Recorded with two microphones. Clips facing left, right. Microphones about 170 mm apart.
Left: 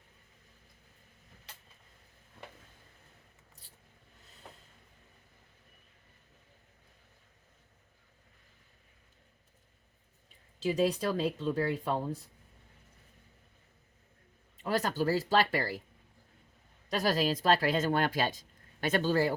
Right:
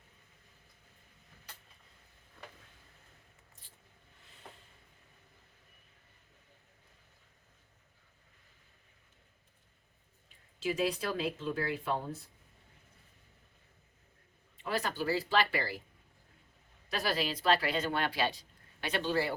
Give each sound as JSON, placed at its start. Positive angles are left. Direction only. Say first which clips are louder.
{"t": 10.6, "sound": "speech", "louder": "left 4 dB", "side_deg": 35}
{"t": 14.6, "sound": "speech", "louder": "left 4 dB", "side_deg": 40}
{"t": 16.9, "sound": "speech", "louder": "left 5 dB", "side_deg": 40}